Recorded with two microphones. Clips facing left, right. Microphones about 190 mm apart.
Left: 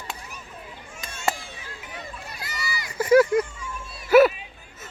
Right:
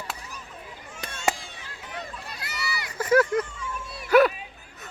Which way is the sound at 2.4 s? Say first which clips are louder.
Even; 65° right (ahead or behind).